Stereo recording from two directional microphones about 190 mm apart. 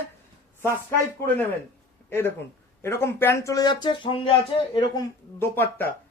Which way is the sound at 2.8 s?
15° left (ahead or behind).